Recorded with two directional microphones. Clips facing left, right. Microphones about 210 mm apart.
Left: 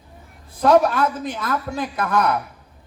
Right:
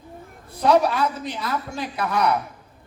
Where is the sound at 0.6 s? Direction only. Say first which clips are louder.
Left 3 dB; 50° left (ahead or behind).